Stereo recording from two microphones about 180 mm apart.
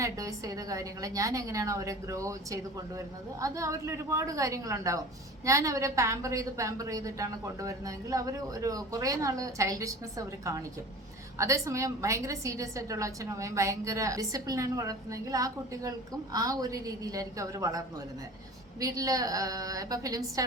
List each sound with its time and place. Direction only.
0.0 s a woman's voice: 20° right (ahead or behind)